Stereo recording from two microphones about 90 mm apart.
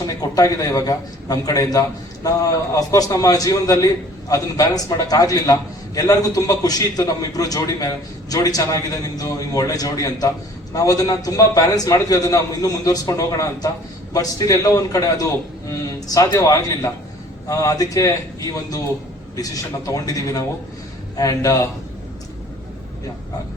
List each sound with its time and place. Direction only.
0.0 s a man's voice: 40° left (ahead or behind)